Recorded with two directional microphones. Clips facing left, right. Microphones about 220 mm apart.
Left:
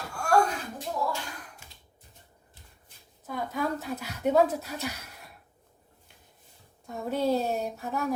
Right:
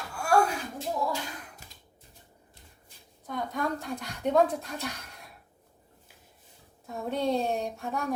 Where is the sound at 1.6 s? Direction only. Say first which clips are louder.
Right 1 dB; 40° right (ahead or behind).